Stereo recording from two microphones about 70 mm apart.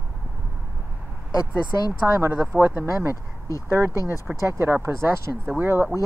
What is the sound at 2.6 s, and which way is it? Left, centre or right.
Speech, right.